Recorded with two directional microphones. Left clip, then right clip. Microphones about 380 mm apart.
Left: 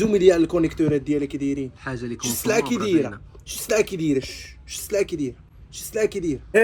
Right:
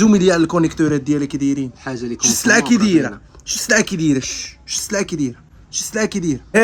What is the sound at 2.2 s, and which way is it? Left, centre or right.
Speech, right.